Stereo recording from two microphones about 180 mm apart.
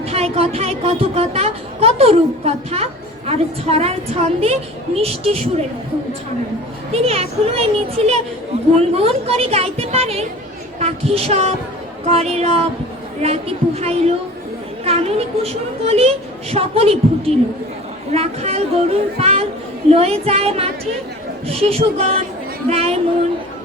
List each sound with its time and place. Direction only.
0.0 s speech: 35° right (ahead or behind)
6.9 s speech: 35° right (ahead or behind)
10.8 s a sound: 35° right (ahead or behind)
12.0 s speech: 35° right (ahead or behind)